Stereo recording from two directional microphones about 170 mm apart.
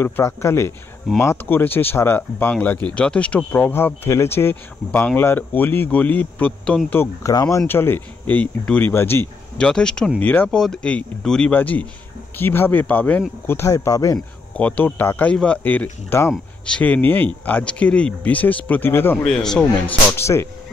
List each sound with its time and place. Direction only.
0.0 s speech: 15° left (ahead or behind)
14.6 s speech: 5° left (ahead or behind)